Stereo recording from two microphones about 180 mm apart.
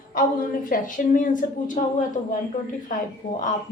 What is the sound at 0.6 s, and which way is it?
A woman's voice, 45° left (ahead or behind).